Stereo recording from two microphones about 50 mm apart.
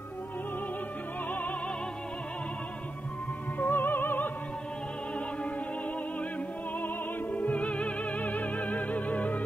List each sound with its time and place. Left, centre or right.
3.5 s opera: left
6.8 s music: left